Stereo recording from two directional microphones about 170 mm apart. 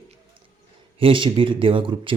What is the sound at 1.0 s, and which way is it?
Speech, 30° right (ahead or behind).